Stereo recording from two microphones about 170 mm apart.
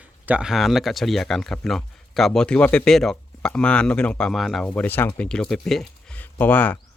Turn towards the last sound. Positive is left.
turn(degrees=10)  # may be behind; listen again after turning